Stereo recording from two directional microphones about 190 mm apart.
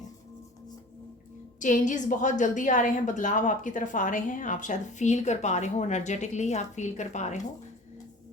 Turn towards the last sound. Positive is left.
turn(degrees=40)  # may be behind; listen again after turning